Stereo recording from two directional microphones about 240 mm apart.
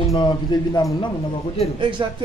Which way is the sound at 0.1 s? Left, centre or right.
Centre.